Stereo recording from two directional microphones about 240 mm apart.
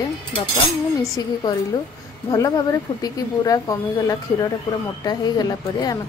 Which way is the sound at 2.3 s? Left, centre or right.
Centre.